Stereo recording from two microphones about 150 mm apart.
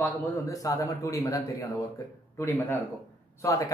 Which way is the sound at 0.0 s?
20° left (ahead or behind).